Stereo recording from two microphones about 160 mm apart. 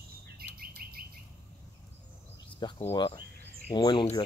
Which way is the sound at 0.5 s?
70° right (ahead or behind).